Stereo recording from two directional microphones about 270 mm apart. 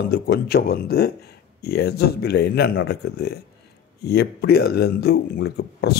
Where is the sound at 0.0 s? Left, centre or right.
Left.